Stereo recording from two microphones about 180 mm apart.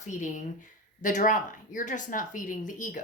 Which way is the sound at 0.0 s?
45° left (ahead or behind).